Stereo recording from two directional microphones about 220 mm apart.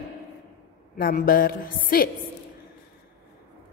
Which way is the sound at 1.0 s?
40° left (ahead or behind).